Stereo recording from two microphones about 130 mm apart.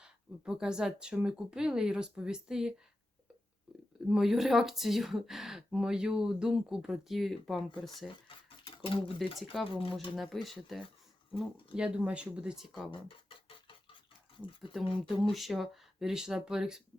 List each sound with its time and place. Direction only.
0.0 s speech: 5° right (ahead or behind)
4.1 s speech: centre (ahead or behind)
8.4 s a sound: 45° left (ahead or behind)
9.1 s speech: centre (ahead or behind)
12.9 s a sound: 40° left (ahead or behind)
14.3 s speech: 40° left (ahead or behind)
14.7 s speech: centre (ahead or behind)